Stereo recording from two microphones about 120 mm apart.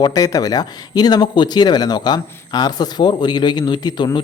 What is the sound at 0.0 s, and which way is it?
Speech, 30° left (ahead or behind).